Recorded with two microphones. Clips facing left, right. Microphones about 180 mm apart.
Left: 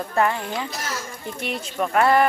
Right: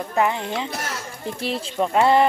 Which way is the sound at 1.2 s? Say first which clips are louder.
Right 5 dB; 30° right (ahead or behind).